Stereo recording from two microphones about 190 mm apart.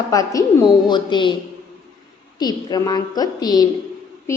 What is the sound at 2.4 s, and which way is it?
A woman's voice, 20° left (ahead or behind).